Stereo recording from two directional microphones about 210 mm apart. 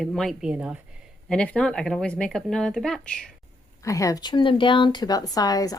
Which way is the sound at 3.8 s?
15° left (ahead or behind).